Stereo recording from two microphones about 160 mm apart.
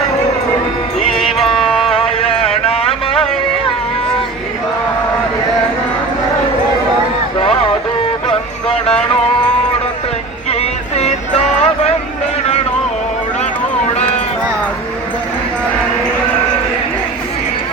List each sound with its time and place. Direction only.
0.9 s music: 35° left (ahead or behind)
1.5 s music: centre (ahead or behind)
2.0 s a sound: 35° left (ahead or behind)
7.3 s a sound: 35° left (ahead or behind)
8.3 s music: 35° left (ahead or behind)
10.5 s music: 40° left (ahead or behind)